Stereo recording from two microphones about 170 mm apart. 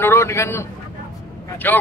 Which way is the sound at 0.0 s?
15° left (ahead or behind).